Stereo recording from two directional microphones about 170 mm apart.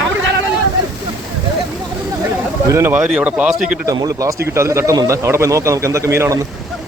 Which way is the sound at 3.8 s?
20° right (ahead or behind).